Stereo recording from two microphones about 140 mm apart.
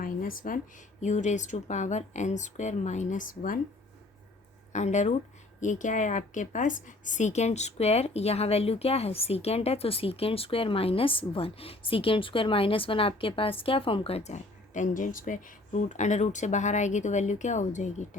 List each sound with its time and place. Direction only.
0.0 s a sound: 80° left
1.0 s speech: 60° left (ahead or behind); by 3.6 s 80° left
4.7 s a woman's voice: 55° left (ahead or behind)